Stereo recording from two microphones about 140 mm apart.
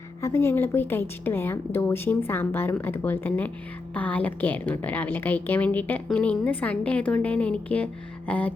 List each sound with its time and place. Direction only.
0.2 s a woman's voice: 20° left (ahead or behind)